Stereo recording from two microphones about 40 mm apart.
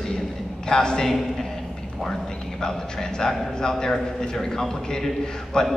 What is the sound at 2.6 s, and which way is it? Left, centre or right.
A man's voice, centre.